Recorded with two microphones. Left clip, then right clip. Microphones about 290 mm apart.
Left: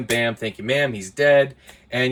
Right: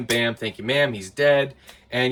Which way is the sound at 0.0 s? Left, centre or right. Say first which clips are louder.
Left 1 dB; centre.